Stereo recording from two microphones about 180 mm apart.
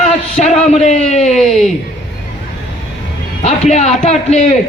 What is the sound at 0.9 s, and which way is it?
Speech, 40° left (ahead or behind).